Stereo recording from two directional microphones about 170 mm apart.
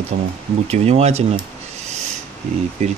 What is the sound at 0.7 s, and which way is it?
Speech, 40° right (ahead or behind).